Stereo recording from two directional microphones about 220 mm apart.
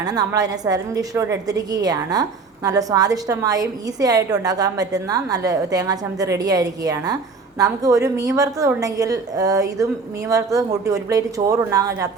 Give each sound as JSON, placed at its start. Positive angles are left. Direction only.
{"t": 0.0, "sound": "a woman's voice", "side_deg": -15}